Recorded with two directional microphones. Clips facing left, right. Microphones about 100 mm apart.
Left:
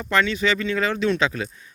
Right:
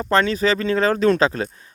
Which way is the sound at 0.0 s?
35° right (ahead or behind).